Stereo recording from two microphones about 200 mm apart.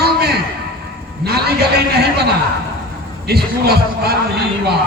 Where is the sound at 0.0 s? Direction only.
55° right (ahead or behind).